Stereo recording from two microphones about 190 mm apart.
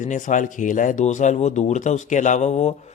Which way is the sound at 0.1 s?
40° left (ahead or behind).